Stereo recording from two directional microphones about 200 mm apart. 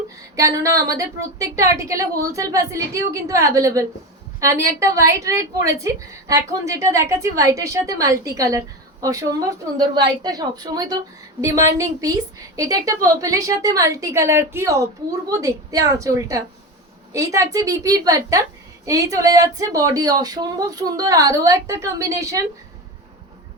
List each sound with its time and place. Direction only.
0.3 s a woman's voice: 15° right (ahead or behind)